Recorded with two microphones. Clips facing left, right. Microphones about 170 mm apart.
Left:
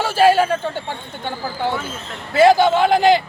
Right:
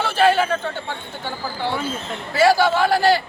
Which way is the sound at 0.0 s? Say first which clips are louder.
Left 3 dB; 10° left (ahead or behind).